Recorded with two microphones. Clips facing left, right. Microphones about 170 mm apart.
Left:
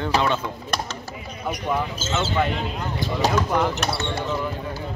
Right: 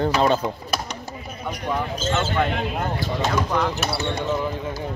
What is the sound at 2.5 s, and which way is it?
Speech, 55° right (ahead or behind).